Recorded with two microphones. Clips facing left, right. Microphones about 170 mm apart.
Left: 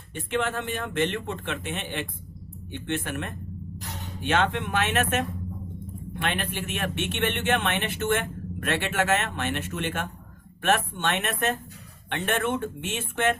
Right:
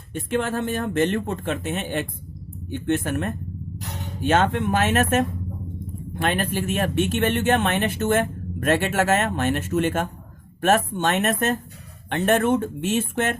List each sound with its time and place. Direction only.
0.1 s speech: 40° right (ahead or behind)